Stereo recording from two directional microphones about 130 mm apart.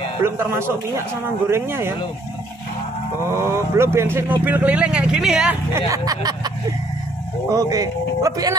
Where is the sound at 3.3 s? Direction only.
20° right (ahead or behind); by 5.5 s 5° right (ahead or behind).